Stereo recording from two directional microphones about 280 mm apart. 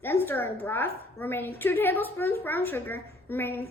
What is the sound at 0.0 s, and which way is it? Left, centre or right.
A woman's voice, centre.